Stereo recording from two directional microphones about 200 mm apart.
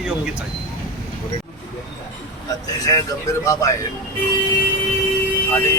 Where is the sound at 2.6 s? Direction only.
20° left (ahead or behind).